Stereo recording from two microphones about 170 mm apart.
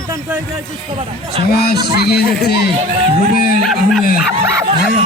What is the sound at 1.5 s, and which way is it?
Speech, 65° left (ahead or behind).